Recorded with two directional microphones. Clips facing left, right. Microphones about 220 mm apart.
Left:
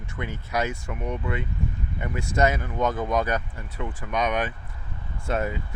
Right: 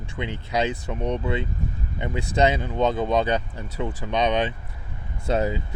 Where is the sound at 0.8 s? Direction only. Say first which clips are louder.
Right 4 dB; 35° right (ahead or behind).